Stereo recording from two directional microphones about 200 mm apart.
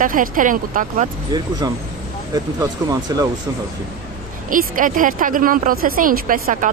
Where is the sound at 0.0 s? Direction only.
45° right (ahead or behind).